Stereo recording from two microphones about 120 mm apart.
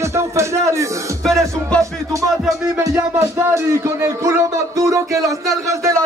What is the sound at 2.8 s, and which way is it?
Music, 25° right (ahead or behind).